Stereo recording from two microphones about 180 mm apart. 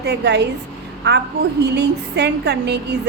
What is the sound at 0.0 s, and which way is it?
A woman's voice, 70° right (ahead or behind).